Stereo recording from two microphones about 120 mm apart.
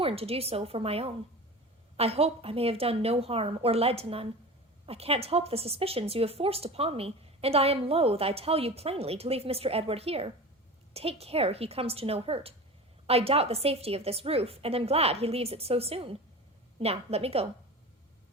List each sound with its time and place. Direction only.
0.0 s a woman's voice: 55° right (ahead or behind)